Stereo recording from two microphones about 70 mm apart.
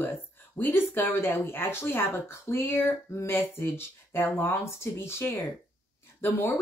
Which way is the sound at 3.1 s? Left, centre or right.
Left.